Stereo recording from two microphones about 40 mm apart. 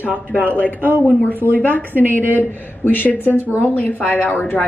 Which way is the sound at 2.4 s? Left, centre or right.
Left.